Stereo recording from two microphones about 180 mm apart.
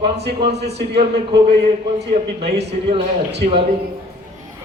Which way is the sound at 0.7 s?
65° right (ahead or behind).